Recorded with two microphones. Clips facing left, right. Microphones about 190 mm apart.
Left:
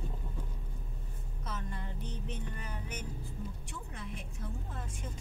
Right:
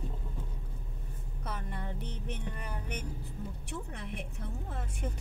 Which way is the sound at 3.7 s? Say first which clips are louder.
Right 4 dB; 65° right (ahead or behind).